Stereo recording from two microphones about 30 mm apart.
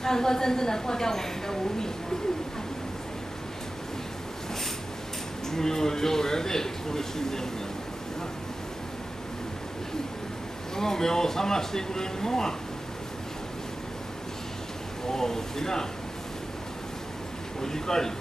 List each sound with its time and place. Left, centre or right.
0.0 s a woman's voice: centre
5.5 s a man's voice: centre
10.8 s a man's voice: centre
15.0 s a man's voice: centre
17.6 s a man's voice: centre